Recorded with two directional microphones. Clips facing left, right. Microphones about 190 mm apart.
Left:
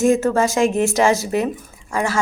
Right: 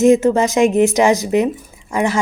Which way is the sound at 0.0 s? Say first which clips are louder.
Right 4 dB; 20° right (ahead or behind).